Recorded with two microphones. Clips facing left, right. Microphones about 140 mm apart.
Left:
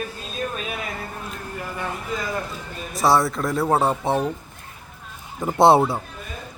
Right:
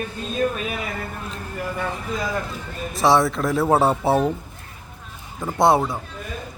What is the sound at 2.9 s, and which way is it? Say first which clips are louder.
A man's voice: right 1 dB; centre (ahead or behind).